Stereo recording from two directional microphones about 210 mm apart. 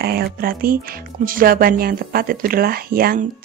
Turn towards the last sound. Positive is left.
turn(degrees=-45)  # may be behind; listen again after turning